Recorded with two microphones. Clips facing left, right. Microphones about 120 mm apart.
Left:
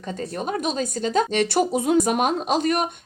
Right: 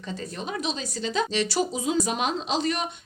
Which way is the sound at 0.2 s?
45° left (ahead or behind).